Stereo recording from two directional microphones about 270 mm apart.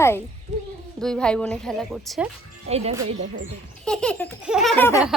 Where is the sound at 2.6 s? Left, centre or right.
Right.